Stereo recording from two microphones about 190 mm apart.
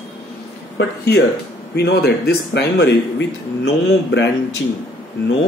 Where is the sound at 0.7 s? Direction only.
60° left (ahead or behind).